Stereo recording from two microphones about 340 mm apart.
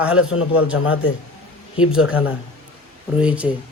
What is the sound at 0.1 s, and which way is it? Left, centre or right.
Speech, left.